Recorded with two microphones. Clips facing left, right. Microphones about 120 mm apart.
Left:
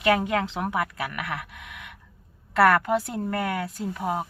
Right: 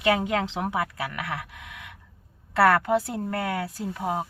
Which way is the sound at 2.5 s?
25° right (ahead or behind).